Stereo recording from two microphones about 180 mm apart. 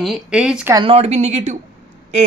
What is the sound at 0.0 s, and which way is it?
Speech, 5° right (ahead or behind).